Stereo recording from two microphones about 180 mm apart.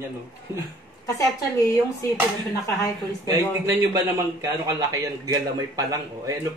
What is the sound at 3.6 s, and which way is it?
A man's voice, 20° right (ahead or behind).